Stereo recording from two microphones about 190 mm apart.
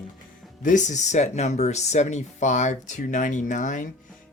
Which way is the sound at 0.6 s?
40° left (ahead or behind).